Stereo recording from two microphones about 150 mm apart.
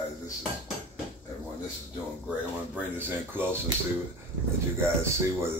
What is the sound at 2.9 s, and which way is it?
Speech, 15° right (ahead or behind).